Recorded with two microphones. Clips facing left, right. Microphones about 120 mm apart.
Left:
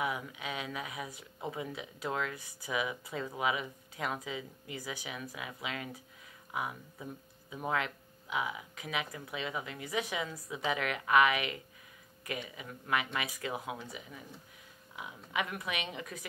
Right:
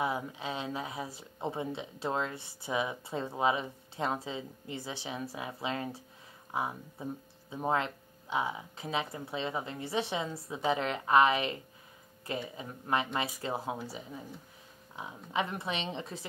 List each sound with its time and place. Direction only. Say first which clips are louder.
0.0 s speech: right 3 dB; 30° right (ahead or behind)